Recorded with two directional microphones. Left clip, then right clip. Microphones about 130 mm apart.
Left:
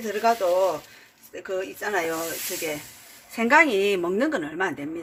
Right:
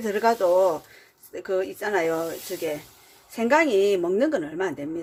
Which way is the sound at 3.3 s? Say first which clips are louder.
Left 1 dB; 20° right (ahead or behind).